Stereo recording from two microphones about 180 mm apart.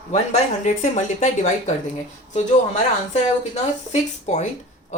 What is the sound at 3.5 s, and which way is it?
Speech, 40° left (ahead or behind).